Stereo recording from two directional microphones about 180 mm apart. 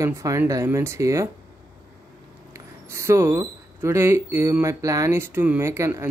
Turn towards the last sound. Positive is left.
turn(degrees=-15)  # may be behind; listen again after turning